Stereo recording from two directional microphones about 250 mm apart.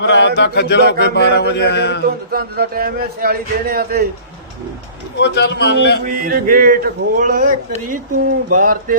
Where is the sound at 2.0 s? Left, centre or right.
Right.